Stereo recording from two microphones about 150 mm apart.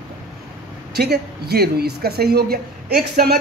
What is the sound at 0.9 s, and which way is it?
A man's voice, 90° right.